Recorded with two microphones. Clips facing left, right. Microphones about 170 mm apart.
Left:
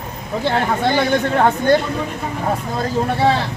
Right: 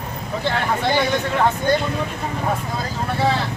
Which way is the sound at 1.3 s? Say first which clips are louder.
Left 4 dB; 50° left (ahead or behind).